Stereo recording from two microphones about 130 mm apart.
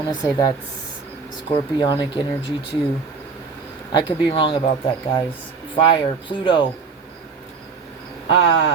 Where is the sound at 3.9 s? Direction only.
35° left (ahead or behind).